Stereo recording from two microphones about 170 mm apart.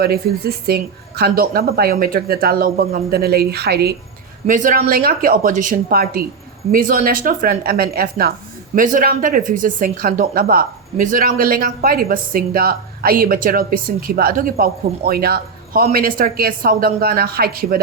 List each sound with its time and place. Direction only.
0.0 s speech: 65° right (ahead or behind)
4.4 s speech: 50° right (ahead or behind)
4.8 s speech: 60° right (ahead or behind)